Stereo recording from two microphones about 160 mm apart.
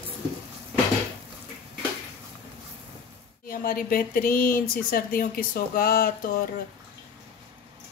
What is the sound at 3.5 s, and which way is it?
Speech, 60° left (ahead or behind).